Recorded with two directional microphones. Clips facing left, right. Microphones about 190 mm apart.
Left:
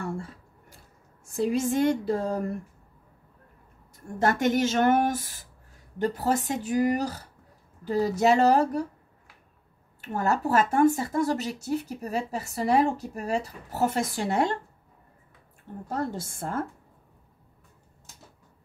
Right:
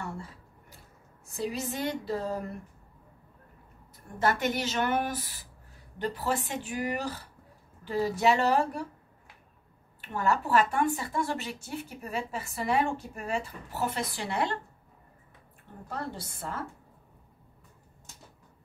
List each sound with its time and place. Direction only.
1.2 s speech: 50° left (ahead or behind)
3.9 s a woman's voice: 45° left (ahead or behind)
10.0 s speech: 40° left (ahead or behind)
15.9 s speech: 45° left (ahead or behind)